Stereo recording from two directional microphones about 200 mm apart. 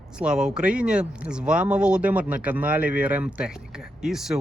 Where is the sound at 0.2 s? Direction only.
5° right (ahead or behind).